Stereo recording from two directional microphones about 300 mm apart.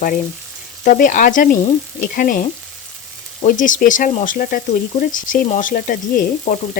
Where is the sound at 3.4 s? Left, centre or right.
Left.